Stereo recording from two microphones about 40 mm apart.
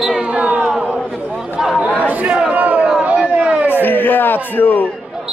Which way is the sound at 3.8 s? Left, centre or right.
Left.